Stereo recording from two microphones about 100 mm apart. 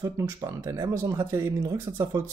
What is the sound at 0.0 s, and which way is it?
Speech, 35° right (ahead or behind).